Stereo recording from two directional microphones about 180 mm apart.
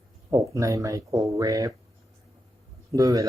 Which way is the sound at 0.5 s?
15° right (ahead or behind).